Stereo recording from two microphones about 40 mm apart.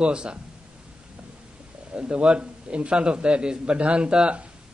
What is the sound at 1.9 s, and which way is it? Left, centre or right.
A man's voice, right.